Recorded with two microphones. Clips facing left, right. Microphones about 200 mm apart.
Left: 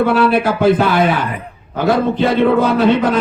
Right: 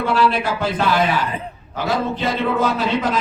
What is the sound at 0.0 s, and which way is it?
Speech, 60° left (ahead or behind).